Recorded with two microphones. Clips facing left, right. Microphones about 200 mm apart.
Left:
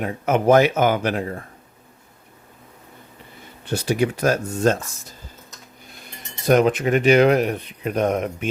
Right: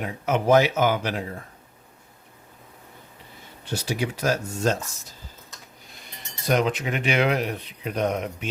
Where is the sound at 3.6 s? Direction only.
55° left (ahead or behind).